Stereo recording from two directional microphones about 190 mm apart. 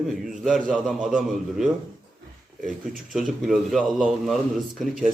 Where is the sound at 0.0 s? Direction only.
Centre (ahead or behind).